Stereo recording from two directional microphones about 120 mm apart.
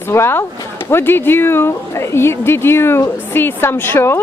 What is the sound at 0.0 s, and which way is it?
A woman's voice, 20° left (ahead or behind).